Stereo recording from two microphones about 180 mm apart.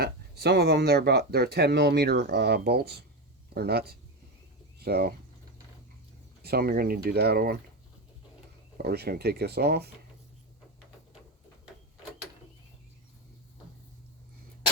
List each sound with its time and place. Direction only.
0.0 s speech: 65° right (ahead or behind)
6.4 s speech: 60° right (ahead or behind)
8.8 s speech: 60° right (ahead or behind)